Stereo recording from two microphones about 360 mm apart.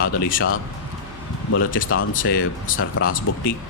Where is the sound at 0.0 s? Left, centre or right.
Left.